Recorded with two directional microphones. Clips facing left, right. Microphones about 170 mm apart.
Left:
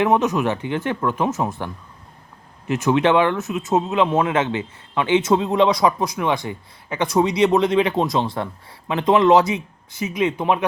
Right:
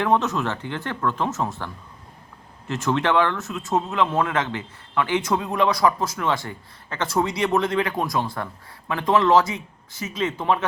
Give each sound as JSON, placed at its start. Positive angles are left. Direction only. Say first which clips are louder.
{"t": 0.0, "sound": "speech", "louder": "left 4 dB", "side_deg": 15}